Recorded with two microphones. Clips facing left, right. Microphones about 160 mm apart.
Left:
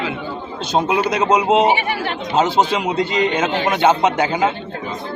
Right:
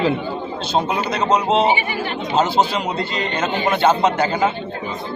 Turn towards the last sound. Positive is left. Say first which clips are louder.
# left 1 dB
turn(degrees=15)  # may be behind; listen again after turning